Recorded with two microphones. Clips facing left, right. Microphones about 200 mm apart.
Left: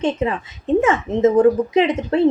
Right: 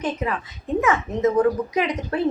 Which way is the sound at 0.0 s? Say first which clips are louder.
Left 5 dB; 25° left (ahead or behind).